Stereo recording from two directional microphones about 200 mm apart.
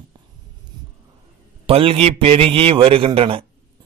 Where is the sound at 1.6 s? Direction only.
30° right (ahead or behind).